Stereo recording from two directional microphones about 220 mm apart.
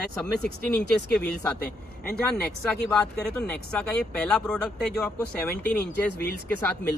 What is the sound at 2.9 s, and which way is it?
Speech, 5° left (ahead or behind).